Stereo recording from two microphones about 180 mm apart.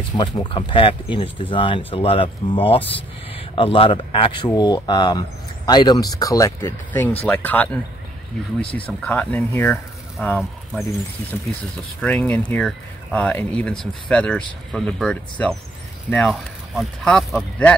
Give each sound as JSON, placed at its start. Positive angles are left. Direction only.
{"t": 0.2, "sound": "speech", "side_deg": 25}
{"t": 12.0, "sound": "speech", "side_deg": 5}